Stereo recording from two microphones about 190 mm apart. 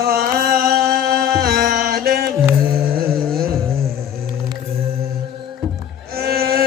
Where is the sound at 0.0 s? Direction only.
50° right (ahead or behind).